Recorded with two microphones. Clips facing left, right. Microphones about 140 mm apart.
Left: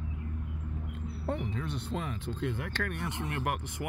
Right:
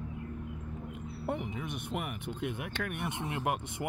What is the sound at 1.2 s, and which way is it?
Speech, 15° right (ahead or behind).